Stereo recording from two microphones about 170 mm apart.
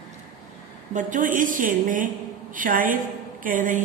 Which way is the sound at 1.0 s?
50° right (ahead or behind).